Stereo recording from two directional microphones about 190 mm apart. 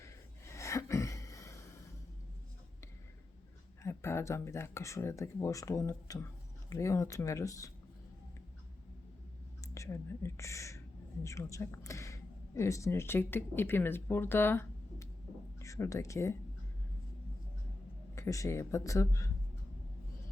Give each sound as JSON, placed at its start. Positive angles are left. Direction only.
{"t": 0.0, "sound": "sneeze", "side_deg": 15}
{"t": 3.8, "sound": "speech", "side_deg": 15}
{"t": 9.7, "sound": "speech", "side_deg": 15}
{"t": 18.1, "sound": "speech", "side_deg": 15}